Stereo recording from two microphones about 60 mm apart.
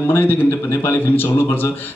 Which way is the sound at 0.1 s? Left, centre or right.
Left.